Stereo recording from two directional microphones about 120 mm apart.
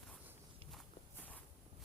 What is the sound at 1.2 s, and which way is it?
Walk, 15° left (ahead or behind).